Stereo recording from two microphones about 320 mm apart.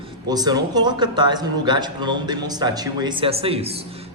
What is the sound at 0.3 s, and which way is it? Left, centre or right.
Speech, centre.